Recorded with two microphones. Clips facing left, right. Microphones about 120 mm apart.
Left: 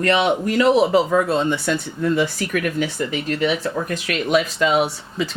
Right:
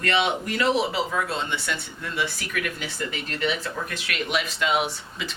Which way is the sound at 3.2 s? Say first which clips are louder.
Left 6 dB; 40° left (ahead or behind).